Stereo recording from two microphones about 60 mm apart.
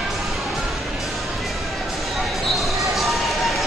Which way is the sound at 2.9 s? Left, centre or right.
Centre.